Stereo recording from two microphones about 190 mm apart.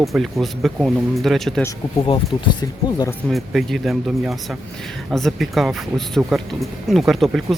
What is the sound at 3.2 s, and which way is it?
Speech, centre (ahead or behind).